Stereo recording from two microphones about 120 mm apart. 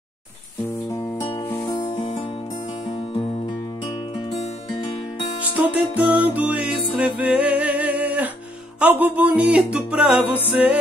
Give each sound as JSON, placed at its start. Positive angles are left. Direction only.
{"t": 1.7, "sound": "music", "side_deg": 30}
{"t": 2.9, "sound": "music", "side_deg": 45}
{"t": 5.6, "sound": "music", "side_deg": -10}